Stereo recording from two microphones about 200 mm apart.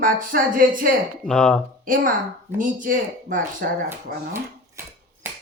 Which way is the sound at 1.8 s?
45° right (ahead or behind).